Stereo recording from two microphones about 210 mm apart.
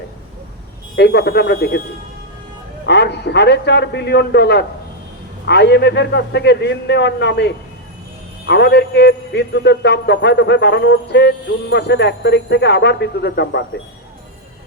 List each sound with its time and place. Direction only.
0.9 s speech: 50° left (ahead or behind)
2.8 s a man's voice: 55° left (ahead or behind)